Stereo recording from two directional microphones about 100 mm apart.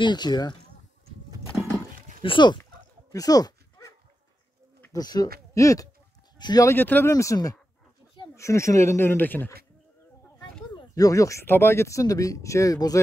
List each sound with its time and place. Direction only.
0.0 s speech: 45° left (ahead or behind)
2.2 s speech: 50° left (ahead or behind)
3.1 s dog: 40° left (ahead or behind)
4.9 s speech: 40° left (ahead or behind)
6.3 s a sound: 45° left (ahead or behind)
6.6 s speech: 20° left (ahead or behind)
7.1 s speech: 35° left (ahead or behind)
11.0 s speech: 35° left (ahead or behind)